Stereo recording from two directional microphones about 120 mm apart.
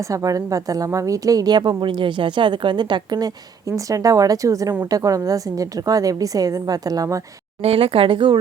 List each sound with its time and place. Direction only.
0.0 s a woman's voice: 30° right (ahead or behind)
7.6 s speech: 55° right (ahead or behind)